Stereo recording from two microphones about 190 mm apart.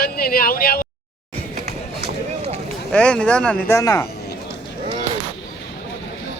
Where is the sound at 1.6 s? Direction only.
60° right (ahead or behind).